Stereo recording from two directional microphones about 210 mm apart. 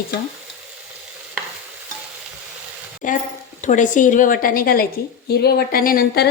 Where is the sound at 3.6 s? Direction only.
35° left (ahead or behind).